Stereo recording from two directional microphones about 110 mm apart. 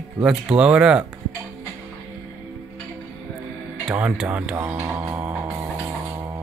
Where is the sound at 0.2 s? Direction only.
10° right (ahead or behind).